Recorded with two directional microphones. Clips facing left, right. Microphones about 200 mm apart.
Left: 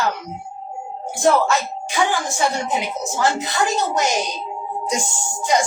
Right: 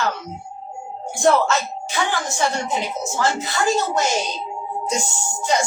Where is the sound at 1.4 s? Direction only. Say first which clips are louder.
Left 1 dB; 10° left (ahead or behind).